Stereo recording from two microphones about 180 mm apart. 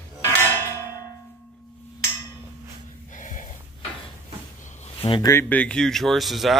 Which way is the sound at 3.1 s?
45° left (ahead or behind).